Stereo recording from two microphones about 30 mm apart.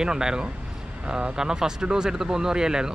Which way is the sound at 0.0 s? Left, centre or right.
Right.